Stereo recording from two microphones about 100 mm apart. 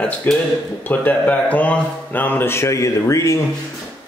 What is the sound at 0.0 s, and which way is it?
Speech, 10° left (ahead or behind).